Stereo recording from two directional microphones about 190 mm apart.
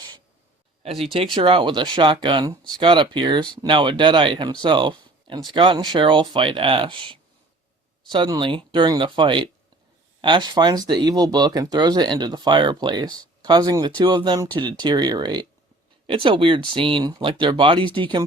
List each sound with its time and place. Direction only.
0.8 s speech: 30° right (ahead or behind)